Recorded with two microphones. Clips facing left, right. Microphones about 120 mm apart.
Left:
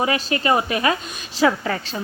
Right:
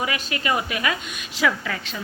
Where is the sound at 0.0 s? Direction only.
35° left (ahead or behind).